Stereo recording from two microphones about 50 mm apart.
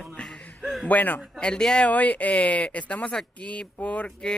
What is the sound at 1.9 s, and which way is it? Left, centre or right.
Speech, left.